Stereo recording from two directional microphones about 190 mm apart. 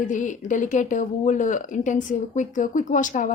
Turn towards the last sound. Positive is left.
turn(degrees=40)  # may be behind; listen again after turning